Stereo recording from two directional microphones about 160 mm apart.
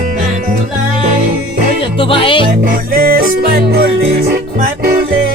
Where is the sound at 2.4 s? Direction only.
60° right (ahead or behind).